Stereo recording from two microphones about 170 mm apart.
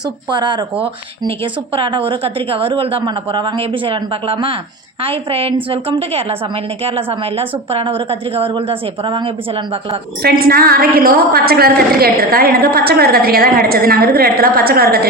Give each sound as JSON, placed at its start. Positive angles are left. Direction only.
{"t": 0.3, "sound": "speech", "side_deg": -25}
{"t": 1.7, "sound": "a woman's voice", "side_deg": -35}
{"t": 6.8, "sound": "a woman's voice", "side_deg": -35}
{"t": 10.2, "sound": "a woman's voice", "side_deg": -65}